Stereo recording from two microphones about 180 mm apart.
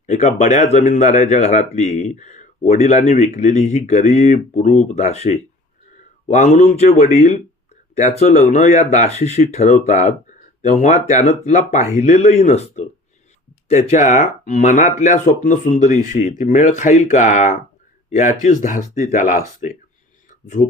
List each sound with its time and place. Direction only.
0.0 s speech: 40° left (ahead or behind)
20.6 s speech: 25° left (ahead or behind)